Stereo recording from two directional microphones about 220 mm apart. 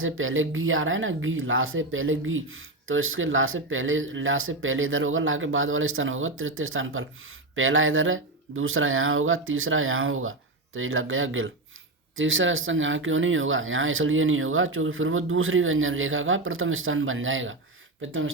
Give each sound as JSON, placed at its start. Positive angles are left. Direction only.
{"t": 0.0, "sound": "speech", "side_deg": -65}